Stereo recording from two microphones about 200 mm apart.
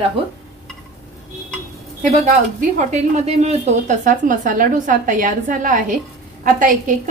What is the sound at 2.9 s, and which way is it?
A woman's voice, 30° right (ahead or behind).